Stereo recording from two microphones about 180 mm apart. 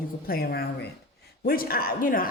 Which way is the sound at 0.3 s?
60° left (ahead or behind).